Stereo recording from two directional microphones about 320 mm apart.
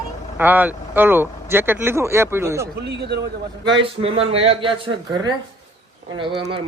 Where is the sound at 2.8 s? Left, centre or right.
Right.